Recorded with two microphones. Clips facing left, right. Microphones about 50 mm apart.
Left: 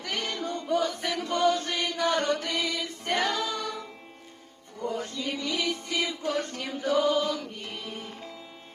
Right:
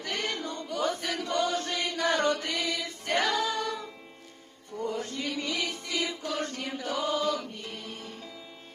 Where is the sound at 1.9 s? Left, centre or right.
Right.